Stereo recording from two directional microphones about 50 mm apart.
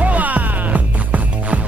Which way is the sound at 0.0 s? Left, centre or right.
Right.